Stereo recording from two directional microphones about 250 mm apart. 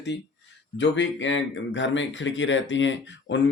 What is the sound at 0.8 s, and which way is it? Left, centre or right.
Speech, left.